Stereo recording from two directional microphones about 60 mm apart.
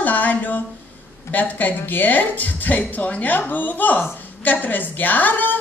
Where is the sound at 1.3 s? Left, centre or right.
Left.